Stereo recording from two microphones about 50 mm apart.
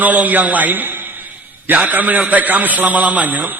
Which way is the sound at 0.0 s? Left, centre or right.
Right.